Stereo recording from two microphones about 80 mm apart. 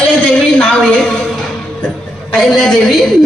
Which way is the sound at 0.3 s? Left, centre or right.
Centre.